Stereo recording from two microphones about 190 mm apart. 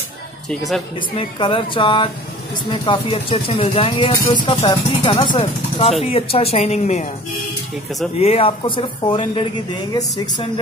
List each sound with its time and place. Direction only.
0.5 s speech: centre (ahead or behind)
0.9 s speech: 25° left (ahead or behind)
8.2 s speech: 30° left (ahead or behind)